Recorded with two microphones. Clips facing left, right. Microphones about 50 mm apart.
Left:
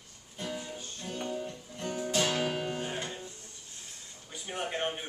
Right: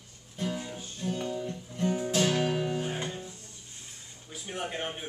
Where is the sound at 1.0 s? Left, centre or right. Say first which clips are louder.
Right 4 dB; centre.